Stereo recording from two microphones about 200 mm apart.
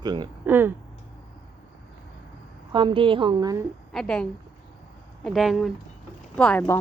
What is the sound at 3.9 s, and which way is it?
Speech, 5° left (ahead or behind).